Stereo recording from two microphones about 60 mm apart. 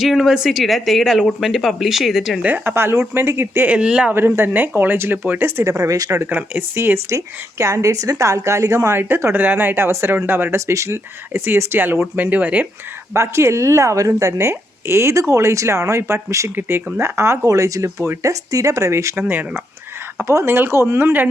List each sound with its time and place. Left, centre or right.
0.0 s speech: centre
2.6 s speech: right
3.7 s speech: centre
4.1 s speech: right
5.8 s speech: right
6.3 s speech: right
6.7 s speech: right
9.0 s speech: right
13.1 s speech: right
14.1 s speech: right
17.4 s speech: right
19.3 s speech: right
20.1 s speech: right